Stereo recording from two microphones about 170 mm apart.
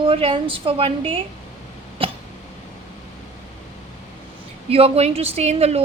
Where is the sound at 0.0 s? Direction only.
30° right (ahead or behind).